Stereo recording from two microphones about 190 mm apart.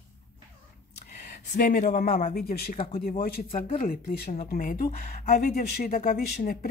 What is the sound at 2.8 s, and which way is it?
Speech, 30° left (ahead or behind).